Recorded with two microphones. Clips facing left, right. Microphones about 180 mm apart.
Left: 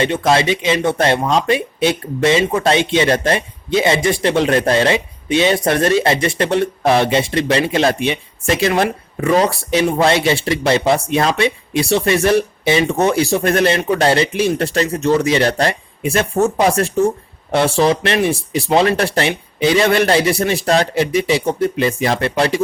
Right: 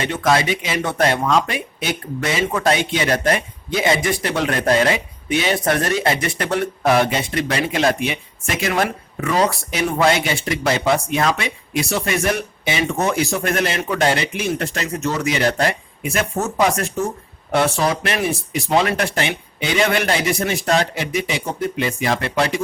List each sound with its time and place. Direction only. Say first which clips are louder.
0.0 s speech: left 4 dB; 25° left (ahead or behind)